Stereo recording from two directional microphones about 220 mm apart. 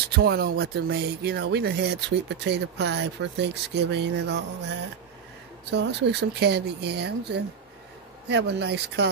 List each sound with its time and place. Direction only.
0.1 s speech: 45° right (ahead or behind)
5.7 s speech: 50° right (ahead or behind)